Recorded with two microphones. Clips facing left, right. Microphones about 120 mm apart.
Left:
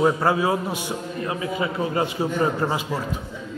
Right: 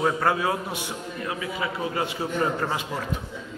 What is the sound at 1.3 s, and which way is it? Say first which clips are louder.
A man's voice: left 4 dB; 30° left (ahead or behind).